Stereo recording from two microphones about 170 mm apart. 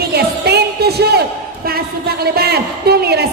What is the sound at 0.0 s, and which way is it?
Music, 70° right (ahead or behind).